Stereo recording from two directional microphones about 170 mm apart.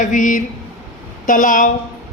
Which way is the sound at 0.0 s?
50° left (ahead or behind).